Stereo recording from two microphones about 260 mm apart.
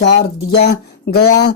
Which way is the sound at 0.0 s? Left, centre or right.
Left.